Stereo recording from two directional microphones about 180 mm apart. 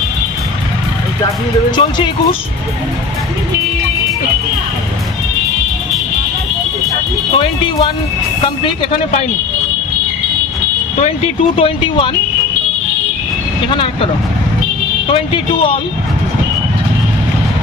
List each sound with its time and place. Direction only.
1.8 s speech: 30° left (ahead or behind)
7.3 s speech: 30° left (ahead or behind)
11.0 s speech: 30° left (ahead or behind)
15.0 s speech: 30° left (ahead or behind)